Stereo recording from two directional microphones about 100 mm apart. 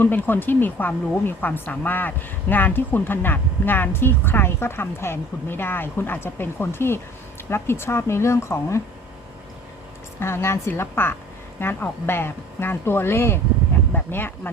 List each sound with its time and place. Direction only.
0.0 s speech: 20° left (ahead or behind)
10.2 s speech: 25° left (ahead or behind)